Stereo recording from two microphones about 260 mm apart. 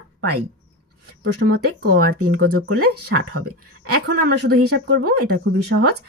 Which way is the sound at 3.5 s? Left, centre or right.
Right.